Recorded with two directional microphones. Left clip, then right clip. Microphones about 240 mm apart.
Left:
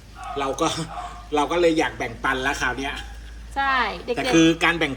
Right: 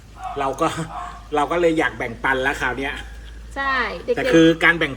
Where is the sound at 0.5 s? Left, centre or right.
Centre.